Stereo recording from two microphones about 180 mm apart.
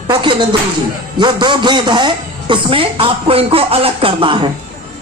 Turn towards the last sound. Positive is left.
turn(degrees=-30)  # may be behind; listen again after turning